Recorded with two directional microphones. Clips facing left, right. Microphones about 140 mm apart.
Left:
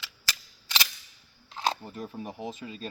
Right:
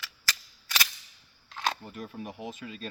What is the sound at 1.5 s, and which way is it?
Speech, 30° left (ahead or behind).